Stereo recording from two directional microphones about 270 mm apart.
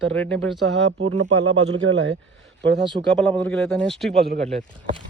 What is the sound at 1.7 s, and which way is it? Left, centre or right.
Speech, right.